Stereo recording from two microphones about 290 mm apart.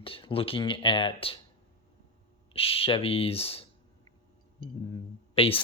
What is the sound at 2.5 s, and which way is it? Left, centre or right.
Speech, centre.